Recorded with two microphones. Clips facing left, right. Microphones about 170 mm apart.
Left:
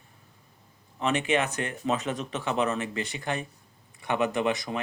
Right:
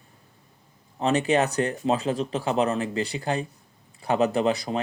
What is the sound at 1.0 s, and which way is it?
Speech, 35° right (ahead or behind).